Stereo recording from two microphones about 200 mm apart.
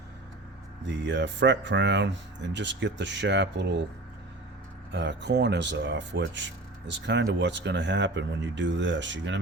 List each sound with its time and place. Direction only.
0.9 s speech: 60° right (ahead or behind)
4.9 s speech: 60° right (ahead or behind)